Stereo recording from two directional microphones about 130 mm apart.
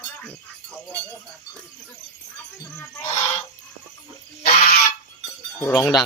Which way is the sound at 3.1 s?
55° left (ahead or behind).